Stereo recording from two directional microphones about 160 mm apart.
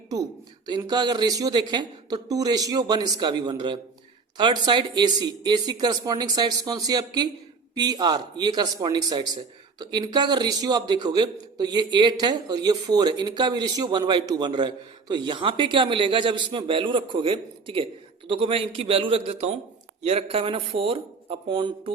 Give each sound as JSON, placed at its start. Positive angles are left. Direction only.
{"t": 0.8, "sound": "speech", "side_deg": -25}